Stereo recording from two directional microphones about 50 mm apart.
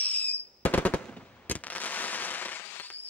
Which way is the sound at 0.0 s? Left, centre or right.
Left.